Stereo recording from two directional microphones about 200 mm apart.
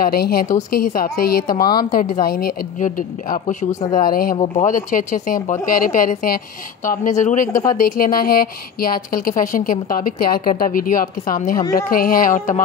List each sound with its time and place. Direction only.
0.0 s speech: 50° left (ahead or behind)
4.4 s speech: 35° left (ahead or behind)